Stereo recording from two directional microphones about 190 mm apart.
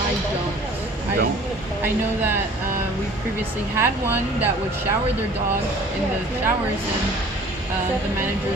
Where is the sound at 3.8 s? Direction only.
10° right (ahead or behind).